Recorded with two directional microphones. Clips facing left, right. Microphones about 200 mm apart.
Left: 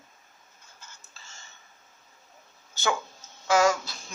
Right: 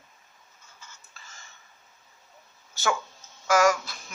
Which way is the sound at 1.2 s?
25° left (ahead or behind).